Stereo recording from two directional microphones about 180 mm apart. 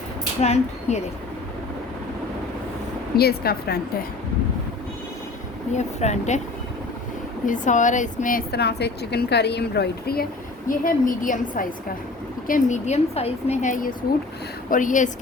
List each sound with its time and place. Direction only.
0.4 s speech: 35° left (ahead or behind)
3.2 s a woman's voice: 60° left (ahead or behind)
5.7 s speech: 40° left (ahead or behind)
7.4 s a woman's voice: 45° left (ahead or behind); by 10.2 s 60° left (ahead or behind)
10.7 s a woman's voice: 50° left (ahead or behind)